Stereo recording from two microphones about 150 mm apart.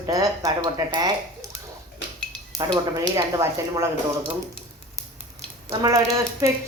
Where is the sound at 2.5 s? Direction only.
20° right (ahead or behind).